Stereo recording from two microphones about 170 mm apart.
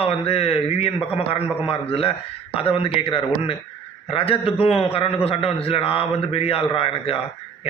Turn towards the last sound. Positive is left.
turn(degrees=35)  # may be behind; listen again after turning